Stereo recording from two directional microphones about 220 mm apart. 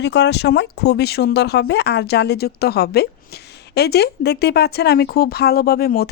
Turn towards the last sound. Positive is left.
turn(degrees=45)  # may be behind; listen again after turning